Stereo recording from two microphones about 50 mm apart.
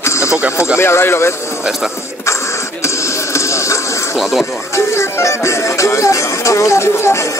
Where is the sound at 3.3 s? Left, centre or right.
Left.